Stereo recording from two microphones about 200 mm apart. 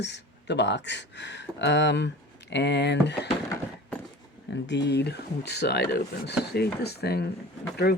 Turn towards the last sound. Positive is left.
turn(degrees=50)  # may be behind; listen again after turning